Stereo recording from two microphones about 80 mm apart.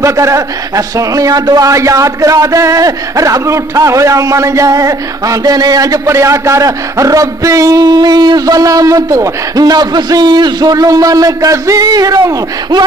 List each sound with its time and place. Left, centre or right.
0.0 s a man's voice: right
1.7 s a man's voice: right